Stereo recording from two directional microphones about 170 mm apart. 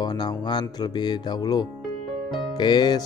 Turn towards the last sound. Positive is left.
turn(degrees=25)  # may be behind; listen again after turning